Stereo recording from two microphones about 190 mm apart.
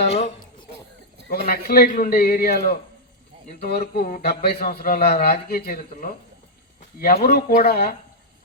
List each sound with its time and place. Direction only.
0.1 s a woman's voice: 35° left (ahead or behind)
1.5 s speech: 55° left (ahead or behind)
7.0 s speech: 55° left (ahead or behind)